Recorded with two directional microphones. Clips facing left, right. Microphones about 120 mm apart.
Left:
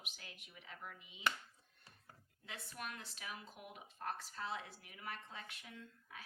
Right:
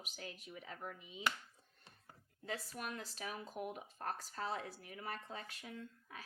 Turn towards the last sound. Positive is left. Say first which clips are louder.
# right 4 dB
turn(degrees=-40)  # may be behind; listen again after turning